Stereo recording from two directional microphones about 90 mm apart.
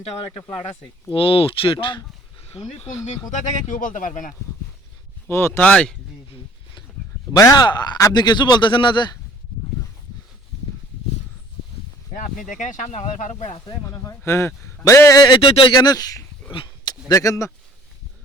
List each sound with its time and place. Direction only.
1.1 s speech: 90° left; by 2.0 s 75° left (ahead or behind)
2.5 s speech: 90° left
5.3 s speech: 25° left (ahead or behind)
5.6 s speech: 10° left (ahead or behind)
7.3 s a man's voice: 45° left (ahead or behind)
13.8 s speech: 30° left (ahead or behind)
15.4 s speech: 90° left
15.8 s speech: 45° left (ahead or behind)